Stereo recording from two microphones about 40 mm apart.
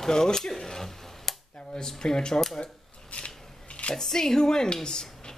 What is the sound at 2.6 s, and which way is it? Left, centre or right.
Scissors, left.